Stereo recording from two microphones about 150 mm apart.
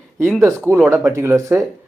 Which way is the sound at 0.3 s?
15° right (ahead or behind).